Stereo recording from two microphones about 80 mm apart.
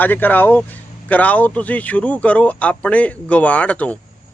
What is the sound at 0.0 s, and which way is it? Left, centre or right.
Speech, left.